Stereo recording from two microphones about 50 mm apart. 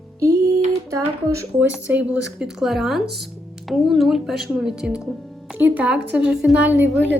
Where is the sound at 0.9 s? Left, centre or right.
Right.